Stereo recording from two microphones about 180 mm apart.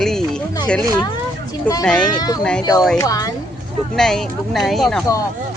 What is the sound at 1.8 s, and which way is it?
Speech, 5° left (ahead or behind).